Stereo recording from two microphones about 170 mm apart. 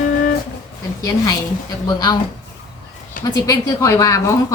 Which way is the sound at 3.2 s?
55° left (ahead or behind).